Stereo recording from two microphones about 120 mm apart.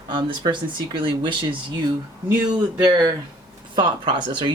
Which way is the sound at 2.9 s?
35° right (ahead or behind).